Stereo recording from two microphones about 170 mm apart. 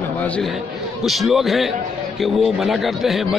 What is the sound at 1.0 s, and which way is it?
Speech, centre (ahead or behind).